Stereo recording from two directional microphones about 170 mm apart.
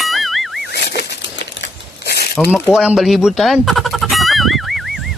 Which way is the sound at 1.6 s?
75° left (ahead or behind).